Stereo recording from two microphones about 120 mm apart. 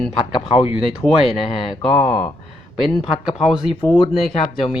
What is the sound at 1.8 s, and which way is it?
Speech, 45° left (ahead or behind).